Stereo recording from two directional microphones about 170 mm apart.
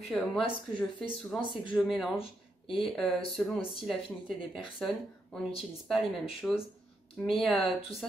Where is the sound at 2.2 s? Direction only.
30° left (ahead or behind).